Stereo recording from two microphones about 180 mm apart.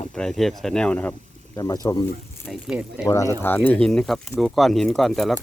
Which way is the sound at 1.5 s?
20° left (ahead or behind).